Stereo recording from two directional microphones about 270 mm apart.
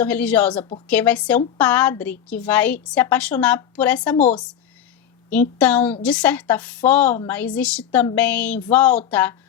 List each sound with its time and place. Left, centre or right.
0.0 s a woman's voice: centre
5.3 s a woman's voice: centre